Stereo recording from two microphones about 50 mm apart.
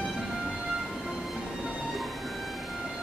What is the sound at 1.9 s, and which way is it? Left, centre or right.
Music, centre.